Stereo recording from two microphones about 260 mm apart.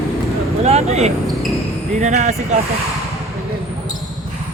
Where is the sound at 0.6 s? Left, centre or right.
Right.